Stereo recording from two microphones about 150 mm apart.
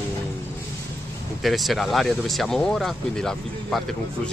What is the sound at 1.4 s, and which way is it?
Speech, centre (ahead or behind).